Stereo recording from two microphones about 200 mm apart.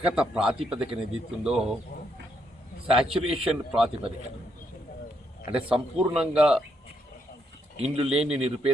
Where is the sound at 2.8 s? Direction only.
30° right (ahead or behind).